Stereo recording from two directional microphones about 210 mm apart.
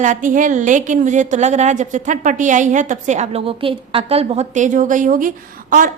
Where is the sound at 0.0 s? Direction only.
35° right (ahead or behind).